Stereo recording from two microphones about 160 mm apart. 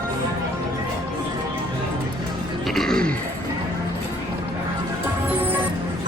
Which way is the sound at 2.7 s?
Centre (ahead or behind).